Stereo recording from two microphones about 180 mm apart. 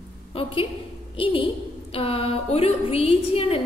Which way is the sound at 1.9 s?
30° left (ahead or behind).